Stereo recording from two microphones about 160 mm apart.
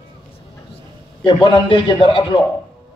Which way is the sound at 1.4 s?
30° left (ahead or behind).